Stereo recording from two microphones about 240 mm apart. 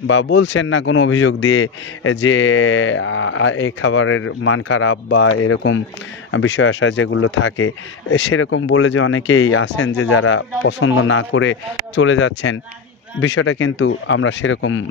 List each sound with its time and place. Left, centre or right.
0.0 s a man's voice: left